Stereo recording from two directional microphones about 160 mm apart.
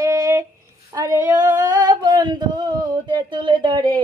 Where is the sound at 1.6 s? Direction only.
25° right (ahead or behind).